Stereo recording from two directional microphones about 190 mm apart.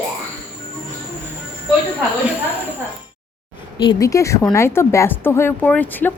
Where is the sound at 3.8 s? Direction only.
20° left (ahead or behind).